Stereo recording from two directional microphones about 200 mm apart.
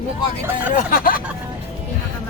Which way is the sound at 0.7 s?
45° left (ahead or behind).